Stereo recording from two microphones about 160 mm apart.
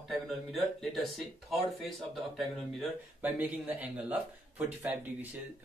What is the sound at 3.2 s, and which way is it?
Speech, 10° right (ahead or behind).